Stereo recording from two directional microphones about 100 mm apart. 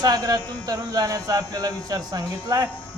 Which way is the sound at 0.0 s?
40° right (ahead or behind).